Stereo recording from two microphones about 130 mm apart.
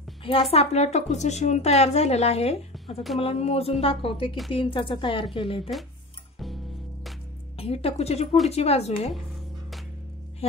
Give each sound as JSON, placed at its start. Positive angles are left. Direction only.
{"t": 0.2, "sound": "a woman's voice", "side_deg": 45}
{"t": 7.5, "sound": "a woman's voice", "side_deg": 50}